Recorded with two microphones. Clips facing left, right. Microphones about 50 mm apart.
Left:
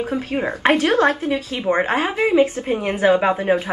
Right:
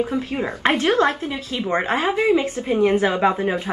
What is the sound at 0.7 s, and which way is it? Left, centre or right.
Speech, left.